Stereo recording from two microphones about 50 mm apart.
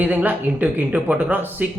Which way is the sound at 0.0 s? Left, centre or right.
Right.